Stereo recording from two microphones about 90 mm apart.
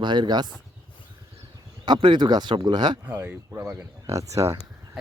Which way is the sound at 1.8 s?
60° right (ahead or behind).